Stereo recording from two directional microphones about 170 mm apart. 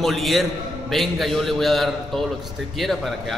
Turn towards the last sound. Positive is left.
turn(degrees=0)  # may be behind; listen again after turning